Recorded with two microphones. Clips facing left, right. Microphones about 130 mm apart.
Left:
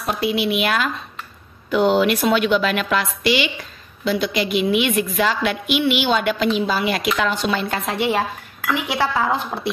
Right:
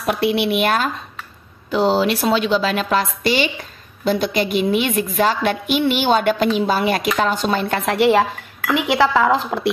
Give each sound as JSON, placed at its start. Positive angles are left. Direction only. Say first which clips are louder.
{"t": 0.0, "sound": "a woman's voice", "louder": "right 3 dB", "side_deg": -65}